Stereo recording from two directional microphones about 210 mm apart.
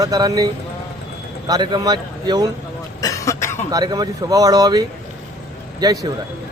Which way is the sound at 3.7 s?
20° right (ahead or behind).